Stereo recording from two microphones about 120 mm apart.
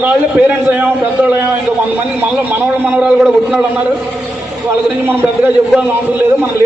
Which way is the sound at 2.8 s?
10° right (ahead or behind).